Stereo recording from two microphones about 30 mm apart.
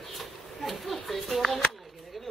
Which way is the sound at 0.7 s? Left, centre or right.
Centre.